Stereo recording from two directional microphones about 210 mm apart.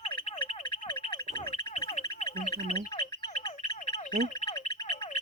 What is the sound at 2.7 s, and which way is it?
Bird, 30° left (ahead or behind).